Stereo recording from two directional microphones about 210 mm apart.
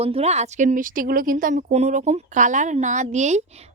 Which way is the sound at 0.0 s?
30° right (ahead or behind).